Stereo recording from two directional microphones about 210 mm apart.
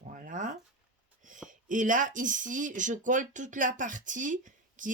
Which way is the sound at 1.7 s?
40° right (ahead or behind).